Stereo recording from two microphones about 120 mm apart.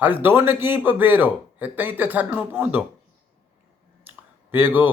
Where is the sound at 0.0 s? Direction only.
15° right (ahead or behind).